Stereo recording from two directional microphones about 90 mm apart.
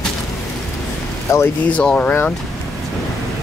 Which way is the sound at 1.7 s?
10° left (ahead or behind).